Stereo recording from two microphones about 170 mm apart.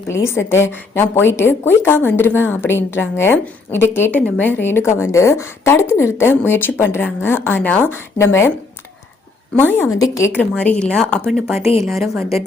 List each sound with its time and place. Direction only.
0.1 s a woman's voice: 15° left (ahead or behind)
9.6 s a woman's voice: 10° left (ahead or behind)
11.6 s a woman's voice: 35° left (ahead or behind)